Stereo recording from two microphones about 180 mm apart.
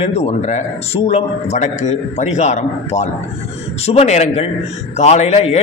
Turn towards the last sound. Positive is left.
turn(degrees=35)  # may be behind; listen again after turning